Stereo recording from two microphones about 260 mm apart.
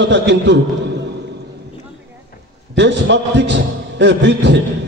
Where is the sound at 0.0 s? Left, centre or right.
Right.